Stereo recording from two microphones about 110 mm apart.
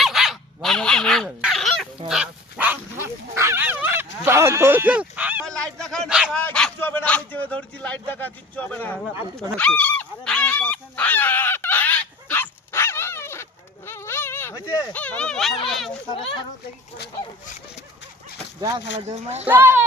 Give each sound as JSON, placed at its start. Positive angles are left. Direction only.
{"t": 0.0, "sound": "a sound", "side_deg": 0}
{"t": 2.0, "sound": "dog", "side_deg": -5}
{"t": 2.6, "sound": "dog", "side_deg": -15}
{"t": 3.3, "sound": "bow-wow", "side_deg": -25}
{"t": 5.5, "sound": "goose", "side_deg": 5}
{"t": 6.1, "sound": "dog", "side_deg": -5}
{"t": 6.3, "sound": "a sound", "side_deg": 10}
{"t": 9.6, "sound": "dog", "side_deg": 10}
{"t": 14.9, "sound": "a sound", "side_deg": 15}
{"t": 18.9, "sound": "speech", "side_deg": -70}
{"t": 19.5, "sound": "a child's voice", "side_deg": -20}